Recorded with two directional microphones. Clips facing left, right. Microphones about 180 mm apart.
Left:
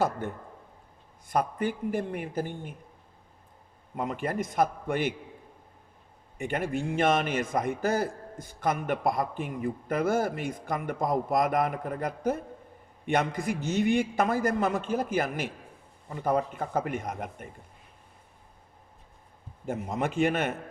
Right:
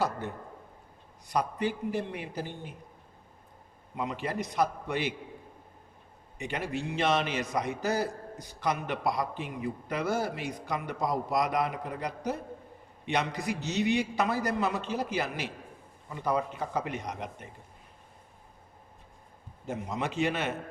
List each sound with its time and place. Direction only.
0.2 s a man's voice: 50° left (ahead or behind)
3.9 s a man's voice: 50° left (ahead or behind)
6.4 s a man's voice: 50° left (ahead or behind)
19.6 s a man's voice: 50° left (ahead or behind)